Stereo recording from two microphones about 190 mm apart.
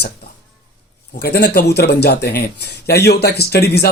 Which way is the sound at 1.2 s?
60° left (ahead or behind).